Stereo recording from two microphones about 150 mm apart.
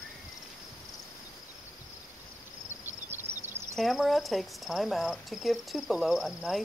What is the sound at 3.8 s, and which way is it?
Cricket, centre (ahead or behind).